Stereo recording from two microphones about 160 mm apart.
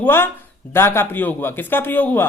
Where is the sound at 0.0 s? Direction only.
15° left (ahead or behind).